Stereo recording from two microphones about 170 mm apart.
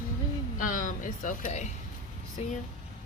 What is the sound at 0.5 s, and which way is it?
Speech, 50° left (ahead or behind).